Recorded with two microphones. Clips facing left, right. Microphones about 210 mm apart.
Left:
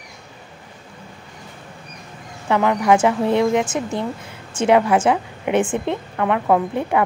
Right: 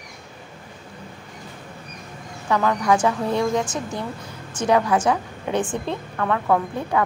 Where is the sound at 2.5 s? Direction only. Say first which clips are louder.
Left 3 dB; 20° left (ahead or behind).